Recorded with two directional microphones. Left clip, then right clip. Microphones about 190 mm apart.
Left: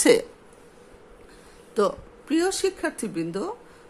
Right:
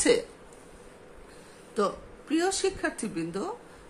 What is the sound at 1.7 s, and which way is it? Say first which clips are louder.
Speech: left 5 dB; 35° left (ahead or behind).